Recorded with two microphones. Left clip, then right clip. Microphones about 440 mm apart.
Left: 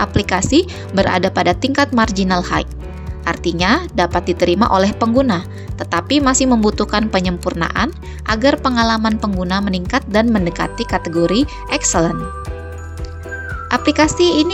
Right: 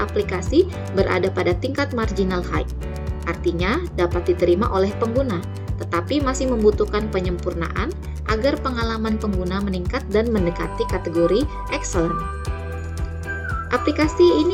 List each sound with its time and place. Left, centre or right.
0.0 s a woman's voice: left
13.7 s a woman's voice: left